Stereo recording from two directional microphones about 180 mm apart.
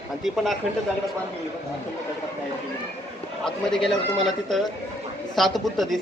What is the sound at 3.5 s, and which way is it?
Speech, 5° left (ahead or behind).